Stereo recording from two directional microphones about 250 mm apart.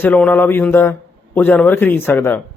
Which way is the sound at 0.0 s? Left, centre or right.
Centre.